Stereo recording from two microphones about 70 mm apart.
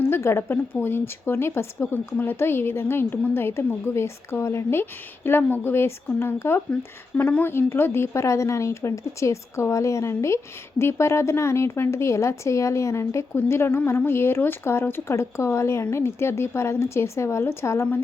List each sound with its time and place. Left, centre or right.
0.0 s a woman's voice: left
15.0 s a woman's voice: left